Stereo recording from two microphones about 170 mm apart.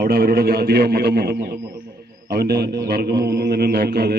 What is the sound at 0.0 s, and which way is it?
A man's voice, 60° right (ahead or behind).